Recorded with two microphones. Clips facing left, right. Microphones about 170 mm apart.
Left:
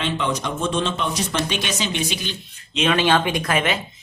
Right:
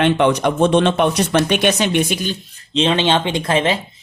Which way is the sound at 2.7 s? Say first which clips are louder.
Right 2 dB; 25° right (ahead or behind).